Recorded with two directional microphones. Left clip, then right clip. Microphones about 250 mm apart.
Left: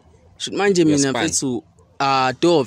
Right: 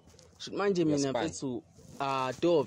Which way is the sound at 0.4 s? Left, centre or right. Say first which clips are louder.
Left 12 dB; left.